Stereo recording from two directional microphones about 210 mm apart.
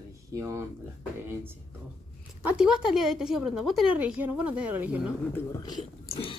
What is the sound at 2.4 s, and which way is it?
A woman's voice, 5° right (ahead or behind).